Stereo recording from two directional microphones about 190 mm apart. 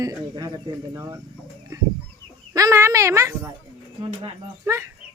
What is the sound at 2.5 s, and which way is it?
Speech, 15° right (ahead or behind).